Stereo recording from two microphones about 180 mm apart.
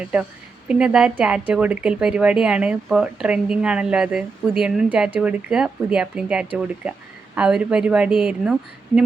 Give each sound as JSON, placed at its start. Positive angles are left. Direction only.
{"t": 0.0, "sound": "a woman's voice", "side_deg": -5}